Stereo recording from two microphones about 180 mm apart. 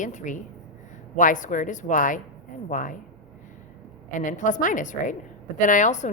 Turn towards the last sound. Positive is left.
turn(degrees=40)  # may be behind; listen again after turning